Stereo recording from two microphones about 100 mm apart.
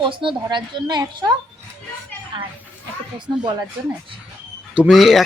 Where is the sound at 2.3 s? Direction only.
55° right (ahead or behind).